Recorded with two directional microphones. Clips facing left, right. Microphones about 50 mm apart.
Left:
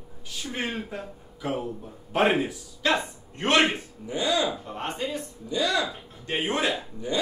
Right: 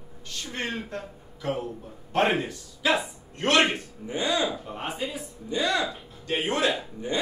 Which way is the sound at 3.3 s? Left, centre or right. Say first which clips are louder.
Even; left.